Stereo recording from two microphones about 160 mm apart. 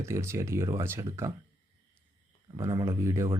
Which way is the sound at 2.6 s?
20° right (ahead or behind).